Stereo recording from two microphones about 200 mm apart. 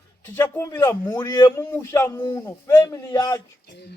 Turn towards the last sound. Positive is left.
turn(degrees=15)  # may be behind; listen again after turning